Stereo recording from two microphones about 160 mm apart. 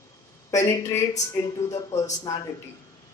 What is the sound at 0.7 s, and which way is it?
Speech, 20° left (ahead or behind).